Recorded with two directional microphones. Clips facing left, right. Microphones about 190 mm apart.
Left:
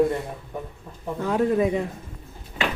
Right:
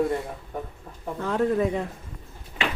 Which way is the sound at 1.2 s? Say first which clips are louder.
Left 2 dB; 15° left (ahead or behind).